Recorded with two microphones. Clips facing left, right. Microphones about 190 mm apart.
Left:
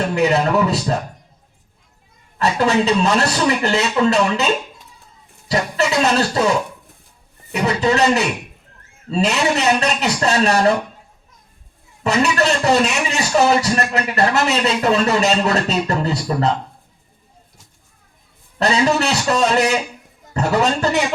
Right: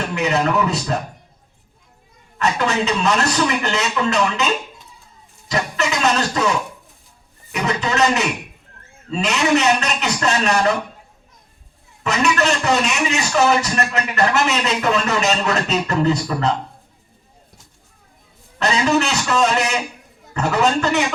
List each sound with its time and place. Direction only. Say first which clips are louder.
0.1 s music: left 1 dB; 35° left (ahead or behind)
2.4 s music: left 3 dB; 35° left (ahead or behind)
5.5 s music: left 3 dB; 35° left (ahead or behind)
7.5 s music: left 4 dB; 35° left (ahead or behind)
12.0 s music: left 2 dB; 35° left (ahead or behind)
18.6 s music: left 1 dB; 35° left (ahead or behind)